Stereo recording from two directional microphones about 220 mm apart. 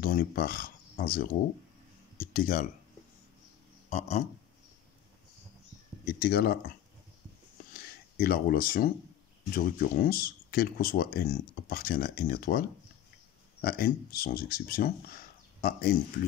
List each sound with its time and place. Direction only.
0.0 s speech: 40° left (ahead or behind)
6.0 s speech: 45° left (ahead or behind)
8.2 s speech: 45° left (ahead or behind)